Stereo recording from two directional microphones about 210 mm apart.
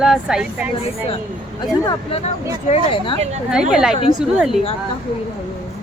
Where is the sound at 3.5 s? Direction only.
5° right (ahead or behind).